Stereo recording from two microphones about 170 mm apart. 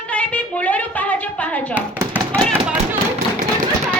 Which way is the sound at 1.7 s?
10° right (ahead or behind).